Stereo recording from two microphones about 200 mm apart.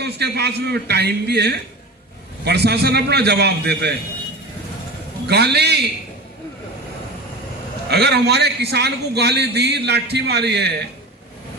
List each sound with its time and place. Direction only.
0.0 s a man's voice: 55° right (ahead or behind)
5.2 s a man's voice: 55° right (ahead or behind)
7.9 s a man's voice: 55° right (ahead or behind)